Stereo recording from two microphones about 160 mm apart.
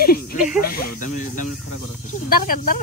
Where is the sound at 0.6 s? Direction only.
65° left (ahead or behind).